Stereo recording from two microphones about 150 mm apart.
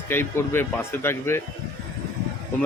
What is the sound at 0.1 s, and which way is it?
Speech, 15° left (ahead or behind).